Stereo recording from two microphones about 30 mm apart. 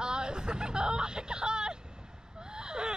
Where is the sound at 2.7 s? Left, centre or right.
Right.